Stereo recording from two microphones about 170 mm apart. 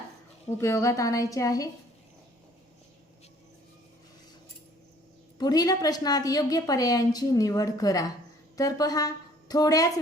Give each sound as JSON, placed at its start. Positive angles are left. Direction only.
{"t": 0.6, "sound": "a woman's voice", "side_deg": 15}
{"t": 5.4, "sound": "a woman's voice", "side_deg": 20}